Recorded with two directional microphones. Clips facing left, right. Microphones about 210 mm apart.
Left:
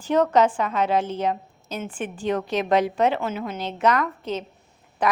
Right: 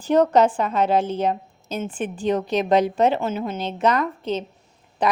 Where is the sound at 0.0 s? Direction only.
35° right (ahead or behind).